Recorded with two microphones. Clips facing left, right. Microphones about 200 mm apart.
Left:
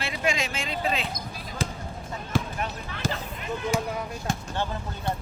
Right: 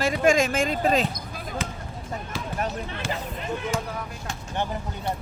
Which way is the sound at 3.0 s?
35° left (ahead or behind).